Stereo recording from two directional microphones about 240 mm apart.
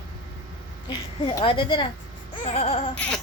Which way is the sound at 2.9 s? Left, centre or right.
Centre.